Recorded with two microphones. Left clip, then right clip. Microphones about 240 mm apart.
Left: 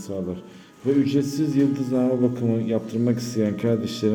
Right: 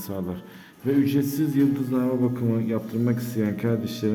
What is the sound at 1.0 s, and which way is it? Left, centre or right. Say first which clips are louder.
A man's voice: left 1 dB; centre.